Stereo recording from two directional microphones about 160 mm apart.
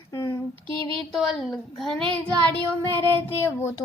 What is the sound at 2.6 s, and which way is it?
Child singing, 25° right (ahead or behind).